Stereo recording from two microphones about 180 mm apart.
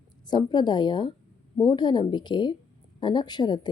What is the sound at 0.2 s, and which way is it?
A woman's voice, 25° left (ahead or behind).